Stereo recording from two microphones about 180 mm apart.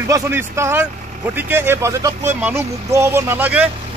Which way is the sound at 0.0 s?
15° right (ahead or behind).